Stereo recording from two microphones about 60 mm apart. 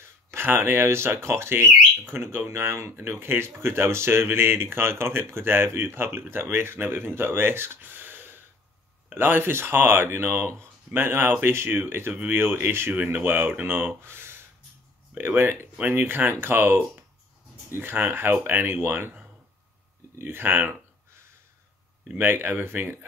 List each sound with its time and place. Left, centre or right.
0.0 s speech: right
12.9 s speech: right
22.2 s speech: right